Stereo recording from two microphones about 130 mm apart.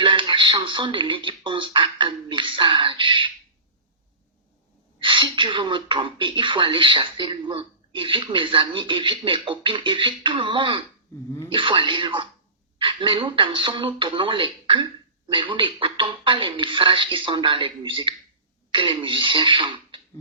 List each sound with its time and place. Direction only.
0.0 s speech: 40° right (ahead or behind)
4.9 s speech: 40° right (ahead or behind)